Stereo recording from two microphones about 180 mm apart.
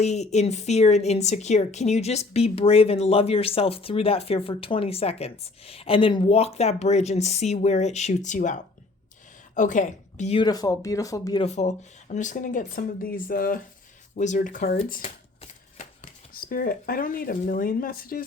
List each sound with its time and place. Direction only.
0.0 s a woman's voice: 40° left (ahead or behind)
10.4 s speech: 20° left (ahead or behind)
11.4 s speech: 40° left (ahead or behind)
15.0 s shuffling cards: 35° left (ahead or behind)
16.3 s speech: 55° left (ahead or behind)